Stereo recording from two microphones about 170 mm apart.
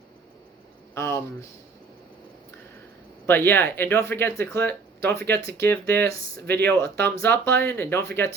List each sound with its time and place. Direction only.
0.9 s speech: 15° left (ahead or behind)
3.2 s speech: 15° left (ahead or behind)
6.4 s speech: 75° right (ahead or behind)
6.7 s speech: 15° left (ahead or behind)